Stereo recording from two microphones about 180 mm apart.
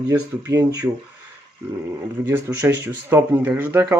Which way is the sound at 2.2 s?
15° right (ahead or behind).